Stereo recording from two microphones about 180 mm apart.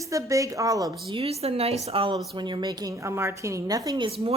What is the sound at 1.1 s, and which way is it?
A woman's voice, 35° right (ahead or behind).